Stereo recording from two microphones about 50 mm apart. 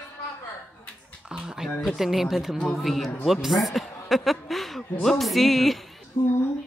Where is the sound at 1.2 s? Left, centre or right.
Centre.